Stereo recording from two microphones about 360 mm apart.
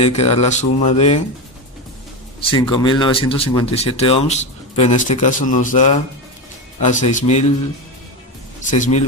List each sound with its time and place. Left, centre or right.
0.0 s speech: centre
2.4 s a man's voice: centre
8.7 s a man's voice: centre